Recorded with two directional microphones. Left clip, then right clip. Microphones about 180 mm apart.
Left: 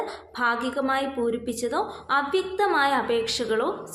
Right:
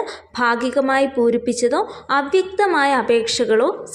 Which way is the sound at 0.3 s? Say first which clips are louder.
Right 7 dB; 30° right (ahead or behind).